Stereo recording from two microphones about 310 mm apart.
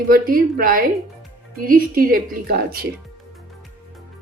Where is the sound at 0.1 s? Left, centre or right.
Right.